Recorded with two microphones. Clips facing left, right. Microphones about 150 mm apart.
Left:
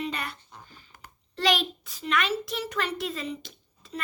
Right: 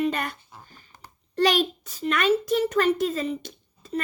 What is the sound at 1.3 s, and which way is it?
A child's voice, 45° right (ahead or behind).